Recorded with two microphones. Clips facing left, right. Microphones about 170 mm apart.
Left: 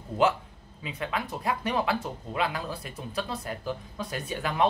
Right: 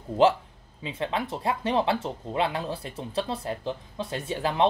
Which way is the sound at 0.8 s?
25° right (ahead or behind).